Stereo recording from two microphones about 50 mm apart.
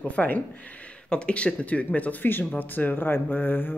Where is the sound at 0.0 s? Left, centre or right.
Left.